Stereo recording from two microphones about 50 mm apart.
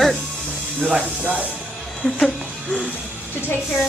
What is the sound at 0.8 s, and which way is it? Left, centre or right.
Speech, right.